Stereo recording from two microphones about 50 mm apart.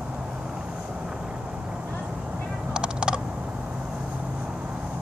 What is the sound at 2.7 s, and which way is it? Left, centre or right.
Typing, centre.